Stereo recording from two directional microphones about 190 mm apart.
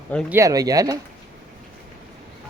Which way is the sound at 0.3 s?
15° right (ahead or behind).